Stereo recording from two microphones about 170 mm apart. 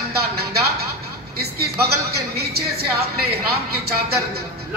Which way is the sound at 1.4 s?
70° right (ahead or behind).